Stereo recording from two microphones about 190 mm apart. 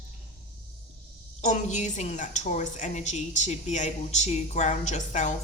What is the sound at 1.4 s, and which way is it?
A woman's voice, 40° left (ahead or behind).